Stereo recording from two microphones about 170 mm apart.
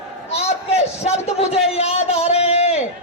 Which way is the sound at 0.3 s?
40° left (ahead or behind).